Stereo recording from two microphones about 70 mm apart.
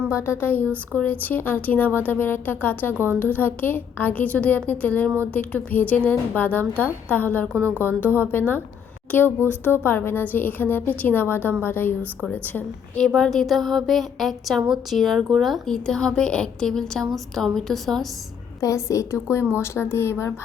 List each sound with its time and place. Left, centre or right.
0.1 s speech: left
13.1 s a woman's voice: centre
18.6 s a woman's voice: left